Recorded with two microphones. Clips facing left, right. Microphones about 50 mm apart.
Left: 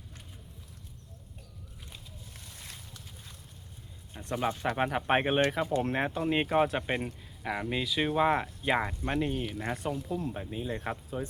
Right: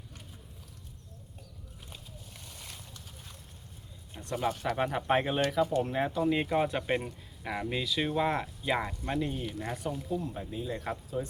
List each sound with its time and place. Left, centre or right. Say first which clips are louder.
4.1 s speech: even; left
6.7 s speech: right 1 dB; centre; by 11.3 s left